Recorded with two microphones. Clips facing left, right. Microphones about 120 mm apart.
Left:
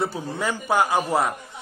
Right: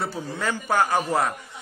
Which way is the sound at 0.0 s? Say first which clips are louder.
Left 2 dB; 15° left (ahead or behind).